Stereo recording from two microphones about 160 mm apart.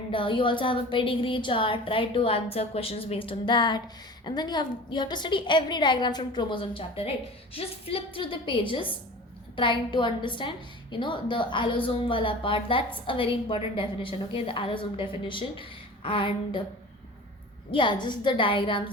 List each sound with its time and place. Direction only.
0.1 s a woman's voice: 30° left (ahead or behind)
17.7 s a woman's voice: 30° left (ahead or behind)